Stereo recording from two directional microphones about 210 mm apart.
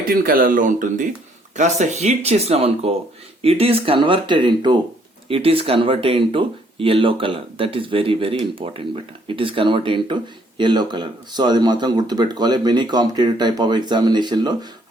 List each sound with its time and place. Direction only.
0.1 s speech: 45° right (ahead or behind); by 14.7 s 20° right (ahead or behind)